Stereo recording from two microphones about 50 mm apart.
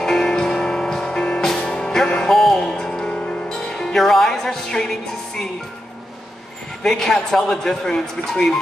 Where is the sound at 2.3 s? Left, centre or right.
Centre.